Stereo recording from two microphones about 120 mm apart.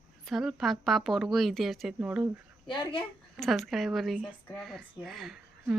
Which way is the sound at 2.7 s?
40° left (ahead or behind).